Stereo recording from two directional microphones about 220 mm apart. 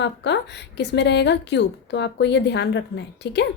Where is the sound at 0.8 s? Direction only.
50° left (ahead or behind).